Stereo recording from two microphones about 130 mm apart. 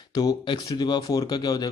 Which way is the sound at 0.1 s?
30° left (ahead or behind).